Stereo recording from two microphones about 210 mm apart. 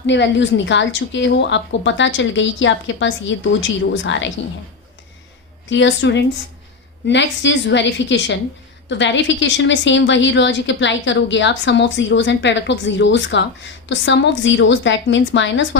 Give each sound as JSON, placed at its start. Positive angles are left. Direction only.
{"t": 0.0, "sound": "a woman's voice", "side_deg": 55}
{"t": 5.6, "sound": "a woman's voice", "side_deg": 60}